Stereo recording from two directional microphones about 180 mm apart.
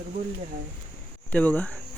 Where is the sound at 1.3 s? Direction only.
10° left (ahead or behind).